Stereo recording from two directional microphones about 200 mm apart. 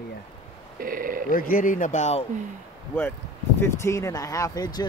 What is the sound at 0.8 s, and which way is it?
Speech, 45° right (ahead or behind).